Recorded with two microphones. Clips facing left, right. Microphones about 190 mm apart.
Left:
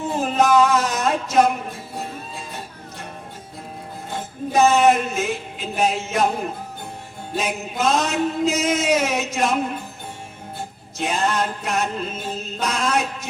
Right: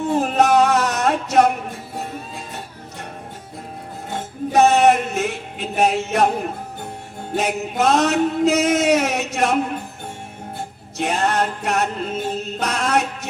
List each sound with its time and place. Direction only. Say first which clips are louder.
0.2 s music: even; 65° right (ahead or behind)
4.5 s music: right 1 dB; 65° right (ahead or behind)
7.3 s a sound: right 4 dB; 65° right (ahead or behind)
10.9 s music: right 2 dB; 65° right (ahead or behind)